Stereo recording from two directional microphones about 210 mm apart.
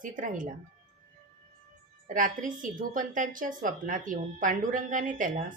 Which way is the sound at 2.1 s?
40° right (ahead or behind).